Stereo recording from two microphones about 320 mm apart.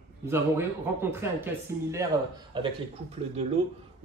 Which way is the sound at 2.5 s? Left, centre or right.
Centre.